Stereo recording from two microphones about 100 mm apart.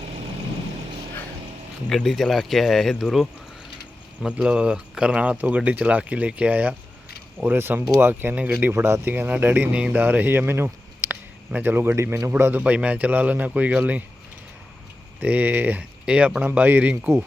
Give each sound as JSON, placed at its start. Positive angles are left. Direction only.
{"t": 1.9, "sound": "speech", "side_deg": 0}
{"t": 12.3, "sound": "speech", "side_deg": -15}
{"t": 15.2, "sound": "speech", "side_deg": -15}